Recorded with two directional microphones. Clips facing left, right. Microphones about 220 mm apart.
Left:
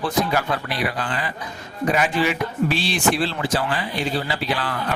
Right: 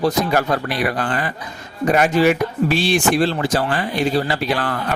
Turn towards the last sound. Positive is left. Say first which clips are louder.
# right 4 dB
turn(degrees=-50)  # may be behind; listen again after turning